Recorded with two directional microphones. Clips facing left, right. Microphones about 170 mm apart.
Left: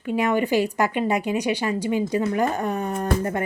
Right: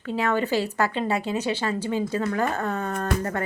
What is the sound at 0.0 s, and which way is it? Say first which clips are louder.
A woman's voice: left 3 dB; 15° left (ahead or behind).